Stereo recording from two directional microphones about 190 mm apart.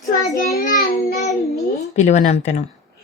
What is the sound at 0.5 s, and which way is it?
Child singing, 50° left (ahead or behind).